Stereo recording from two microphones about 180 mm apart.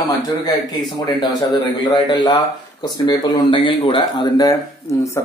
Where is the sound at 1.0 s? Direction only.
25° left (ahead or behind).